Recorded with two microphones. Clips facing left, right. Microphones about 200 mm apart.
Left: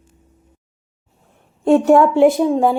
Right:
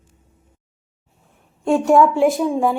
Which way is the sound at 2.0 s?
70° left (ahead or behind).